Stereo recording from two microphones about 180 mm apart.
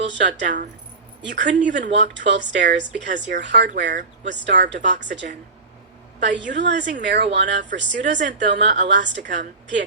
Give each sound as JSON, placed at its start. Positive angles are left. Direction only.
{"t": 0.0, "sound": "a woman's voice", "side_deg": -75}